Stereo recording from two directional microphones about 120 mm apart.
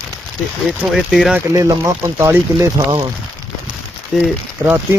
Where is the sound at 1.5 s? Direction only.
25° right (ahead or behind).